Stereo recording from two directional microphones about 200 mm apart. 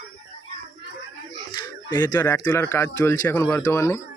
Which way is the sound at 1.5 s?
20° left (ahead or behind).